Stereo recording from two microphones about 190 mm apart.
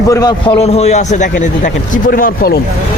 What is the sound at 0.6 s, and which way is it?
A man's voice, 35° left (ahead or behind).